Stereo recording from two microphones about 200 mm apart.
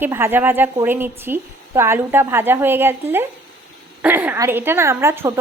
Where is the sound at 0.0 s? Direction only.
10° right (ahead or behind).